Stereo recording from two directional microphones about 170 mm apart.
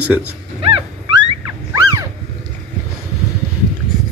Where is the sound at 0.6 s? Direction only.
35° right (ahead or behind).